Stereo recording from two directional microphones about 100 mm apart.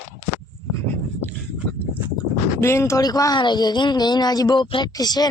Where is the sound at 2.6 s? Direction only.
25° left (ahead or behind); by 4.7 s 40° left (ahead or behind).